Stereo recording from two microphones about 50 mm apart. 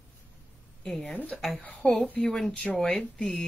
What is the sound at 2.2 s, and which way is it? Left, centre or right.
Speech, centre.